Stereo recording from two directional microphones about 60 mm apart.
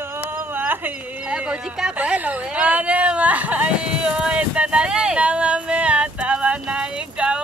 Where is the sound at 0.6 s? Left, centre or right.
Right.